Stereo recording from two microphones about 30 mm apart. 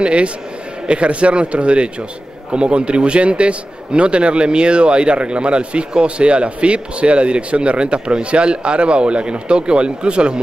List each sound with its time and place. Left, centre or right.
0.0 s a man's voice: right